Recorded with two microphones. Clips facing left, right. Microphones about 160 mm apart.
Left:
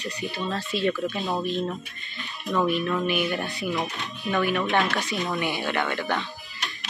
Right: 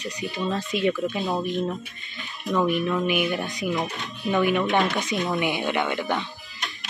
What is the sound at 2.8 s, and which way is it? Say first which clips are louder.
Speech: right 2 dB; 10° right (ahead or behind).